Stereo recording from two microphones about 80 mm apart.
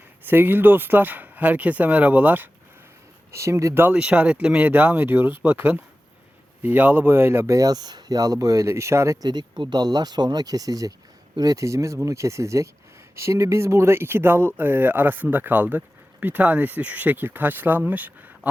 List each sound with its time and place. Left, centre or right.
0.3 s speech: right
3.3 s speech: right
3.9 s speech: centre
7.5 s speech: right
9.2 s speech: right